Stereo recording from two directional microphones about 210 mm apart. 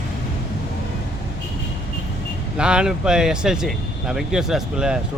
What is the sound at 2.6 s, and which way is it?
Speech, 5° right (ahead or behind).